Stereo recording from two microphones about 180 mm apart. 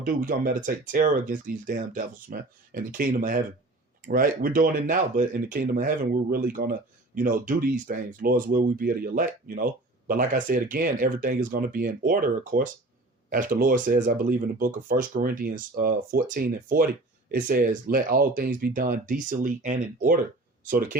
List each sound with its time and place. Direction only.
0.0 s speech: 50° right (ahead or behind)